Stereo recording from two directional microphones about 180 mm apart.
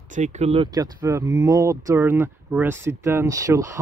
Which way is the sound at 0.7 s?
20° right (ahead or behind).